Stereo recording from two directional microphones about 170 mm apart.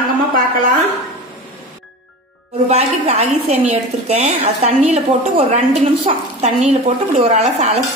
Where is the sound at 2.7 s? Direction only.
40° right (ahead or behind).